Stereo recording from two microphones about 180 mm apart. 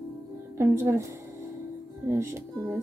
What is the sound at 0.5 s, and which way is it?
Speech, 15° right (ahead or behind).